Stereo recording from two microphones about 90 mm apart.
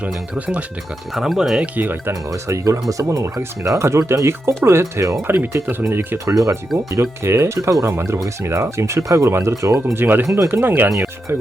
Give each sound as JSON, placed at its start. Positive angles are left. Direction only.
{"t": 0.0, "sound": "speech", "side_deg": -15}
{"t": 1.1, "sound": "speech", "side_deg": -5}
{"t": 1.7, "sound": "speech", "side_deg": -20}
{"t": 2.3, "sound": "speech", "side_deg": -35}
{"t": 5.6, "sound": "speech", "side_deg": -25}
{"t": 6.2, "sound": "speech", "side_deg": -35}
{"t": 9.8, "sound": "speech", "side_deg": -20}